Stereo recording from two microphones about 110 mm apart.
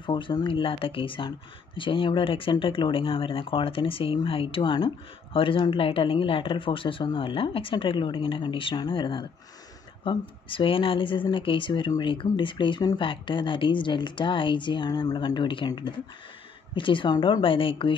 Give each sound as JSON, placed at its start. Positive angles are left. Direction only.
{"t": 0.0, "sound": "speech", "side_deg": 45}